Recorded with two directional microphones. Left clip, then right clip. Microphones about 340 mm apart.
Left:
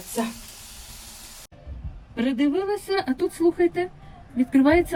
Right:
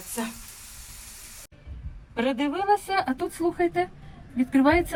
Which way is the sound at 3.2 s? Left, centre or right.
Centre.